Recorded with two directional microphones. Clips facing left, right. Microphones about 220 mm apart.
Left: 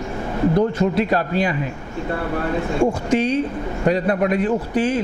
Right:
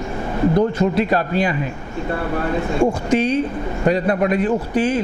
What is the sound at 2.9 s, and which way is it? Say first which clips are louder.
A man's voice: right 1 dB; 10° right (ahead or behind).